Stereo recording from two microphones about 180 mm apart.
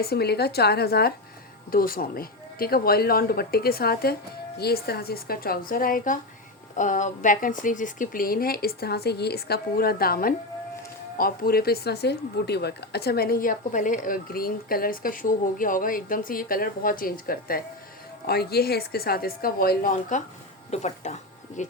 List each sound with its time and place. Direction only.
0.0 s a woman's voice: 60° left (ahead or behind); by 21.7 s 40° left (ahead or behind)